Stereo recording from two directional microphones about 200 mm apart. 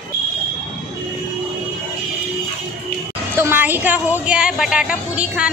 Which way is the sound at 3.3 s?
10° right (ahead or behind).